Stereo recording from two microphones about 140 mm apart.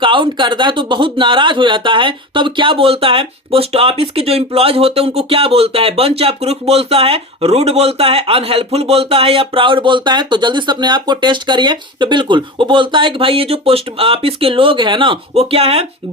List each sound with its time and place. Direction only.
0.0 s speech: 35° right (ahead or behind)